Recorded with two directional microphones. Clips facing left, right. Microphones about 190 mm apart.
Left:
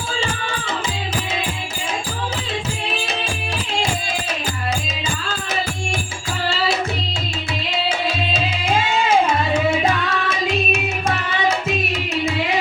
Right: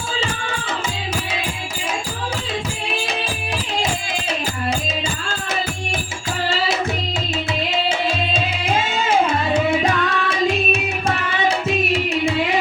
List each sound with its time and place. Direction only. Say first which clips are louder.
10.2 s music: right 2 dB; 30° right (ahead or behind)